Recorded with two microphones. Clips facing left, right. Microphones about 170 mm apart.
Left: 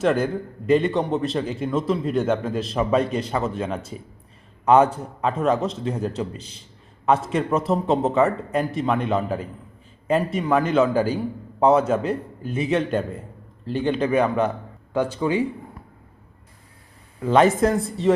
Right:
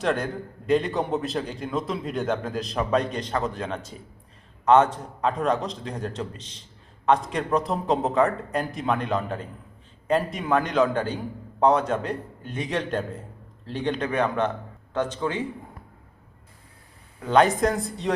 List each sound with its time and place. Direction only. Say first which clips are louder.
0.0 s a man's voice: left 5 dB; centre (ahead or behind)
17.2 s a man's voice: left 3 dB; 5° left (ahead or behind)